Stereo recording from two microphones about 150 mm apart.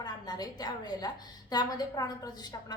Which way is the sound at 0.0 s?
25° left (ahead or behind).